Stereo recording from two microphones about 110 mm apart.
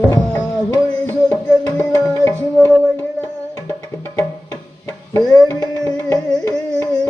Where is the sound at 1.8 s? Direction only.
25° left (ahead or behind).